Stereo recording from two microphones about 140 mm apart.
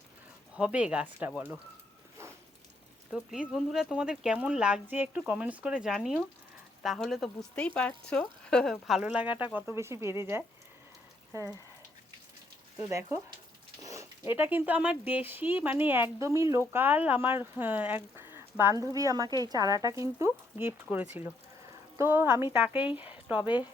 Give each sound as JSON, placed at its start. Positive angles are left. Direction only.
{"t": 0.5, "sound": "speech", "side_deg": -10}
{"t": 3.5, "sound": "speech", "side_deg": -5}
{"t": 9.0, "sound": "speech", "side_deg": -10}
{"t": 12.9, "sound": "speech", "side_deg": -20}